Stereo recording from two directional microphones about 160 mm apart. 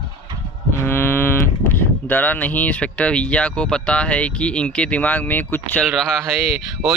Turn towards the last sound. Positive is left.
turn(degrees=0)  # may be behind; listen again after turning